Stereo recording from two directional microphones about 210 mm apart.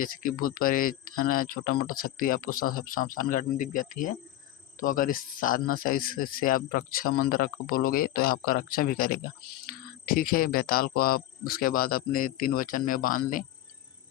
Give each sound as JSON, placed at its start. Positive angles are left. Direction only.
{"t": 0.0, "sound": "speech", "side_deg": 40}